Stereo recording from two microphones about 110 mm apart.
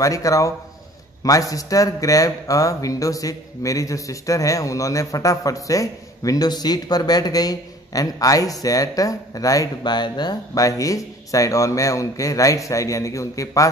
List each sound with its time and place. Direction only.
0.0 s a man's voice: 30° left (ahead or behind)